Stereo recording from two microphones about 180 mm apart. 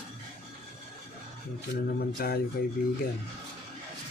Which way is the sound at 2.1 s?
55° left (ahead or behind).